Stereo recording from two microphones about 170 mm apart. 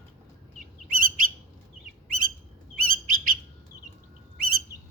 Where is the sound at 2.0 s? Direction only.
55° right (ahead or behind).